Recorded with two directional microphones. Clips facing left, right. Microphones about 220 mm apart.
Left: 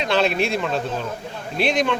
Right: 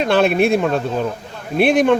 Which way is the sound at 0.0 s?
55° right (ahead or behind).